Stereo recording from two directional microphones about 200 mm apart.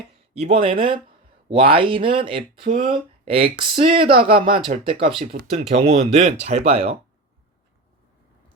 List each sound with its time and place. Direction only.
0.3 s speech: 30° right (ahead or behind)